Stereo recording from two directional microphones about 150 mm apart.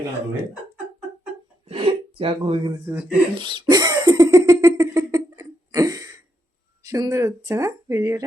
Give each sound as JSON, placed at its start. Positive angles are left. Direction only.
{"t": 1.6, "sound": "speech", "side_deg": -40}
{"t": 2.8, "sound": "speech", "side_deg": -10}
{"t": 3.3, "sound": "cough", "side_deg": -30}
{"t": 6.8, "sound": "speech", "side_deg": -20}